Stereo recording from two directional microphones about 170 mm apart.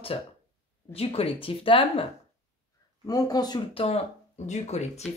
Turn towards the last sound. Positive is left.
turn(degrees=40)  # may be behind; listen again after turning